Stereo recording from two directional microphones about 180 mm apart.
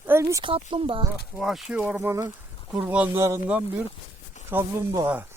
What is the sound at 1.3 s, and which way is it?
Speech, centre (ahead or behind).